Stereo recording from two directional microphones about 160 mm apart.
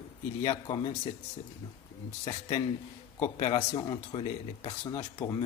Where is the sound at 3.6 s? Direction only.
25° left (ahead or behind).